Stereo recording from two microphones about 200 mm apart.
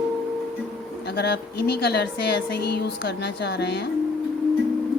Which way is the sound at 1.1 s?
55° left (ahead or behind).